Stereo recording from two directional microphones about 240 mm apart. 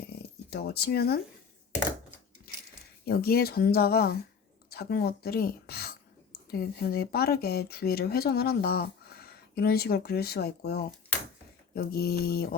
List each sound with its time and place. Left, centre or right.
0.5 s speech: left
3.1 s speech: left